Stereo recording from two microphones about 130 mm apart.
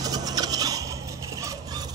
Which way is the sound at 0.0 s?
30° right (ahead or behind).